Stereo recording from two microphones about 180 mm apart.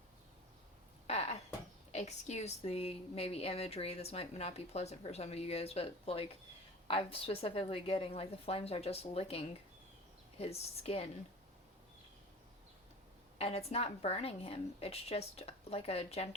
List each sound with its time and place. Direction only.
1.0 s a sound: 35° left (ahead or behind)
1.9 s speech: 40° left (ahead or behind)
13.4 s speech: 35° left (ahead or behind)